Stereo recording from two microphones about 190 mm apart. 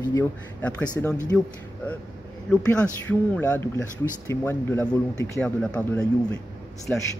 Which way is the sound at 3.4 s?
10° left (ahead or behind).